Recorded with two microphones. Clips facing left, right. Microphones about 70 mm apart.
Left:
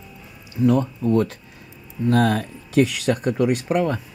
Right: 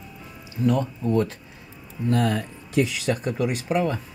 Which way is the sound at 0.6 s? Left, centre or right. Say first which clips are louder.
Left 4 dB; left.